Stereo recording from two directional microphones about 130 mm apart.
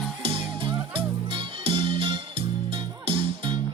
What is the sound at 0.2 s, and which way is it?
Music, 40° right (ahead or behind).